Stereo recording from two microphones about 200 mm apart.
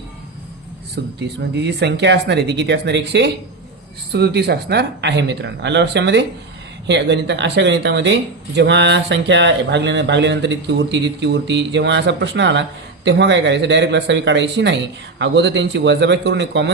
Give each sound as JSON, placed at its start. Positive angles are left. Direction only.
{"t": 1.0, "sound": "speech", "side_deg": -60}